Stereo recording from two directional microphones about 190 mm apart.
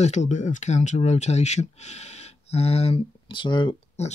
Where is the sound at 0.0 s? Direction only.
40° left (ahead or behind).